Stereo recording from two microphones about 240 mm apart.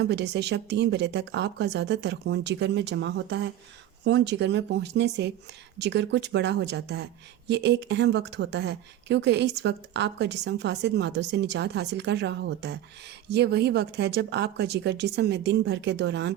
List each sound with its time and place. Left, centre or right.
0.0 s speech: right